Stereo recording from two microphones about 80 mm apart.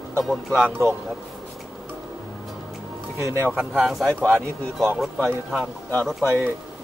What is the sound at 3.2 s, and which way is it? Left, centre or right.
Speech, right.